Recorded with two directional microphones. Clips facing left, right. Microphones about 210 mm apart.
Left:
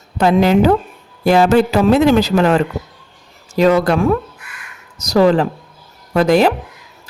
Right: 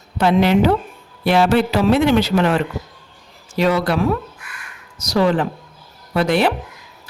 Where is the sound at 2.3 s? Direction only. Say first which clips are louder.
Left 4 dB; 40° left (ahead or behind).